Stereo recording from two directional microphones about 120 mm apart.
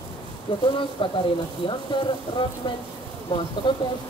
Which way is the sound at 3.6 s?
45° left (ahead or behind).